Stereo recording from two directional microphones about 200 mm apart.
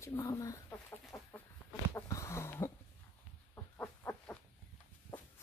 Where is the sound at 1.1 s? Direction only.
15° left (ahead or behind).